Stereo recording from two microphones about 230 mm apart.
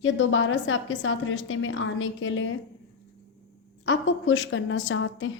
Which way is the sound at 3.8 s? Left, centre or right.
Left.